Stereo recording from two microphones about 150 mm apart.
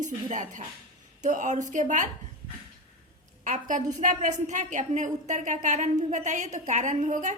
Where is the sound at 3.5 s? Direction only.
60° right (ahead or behind).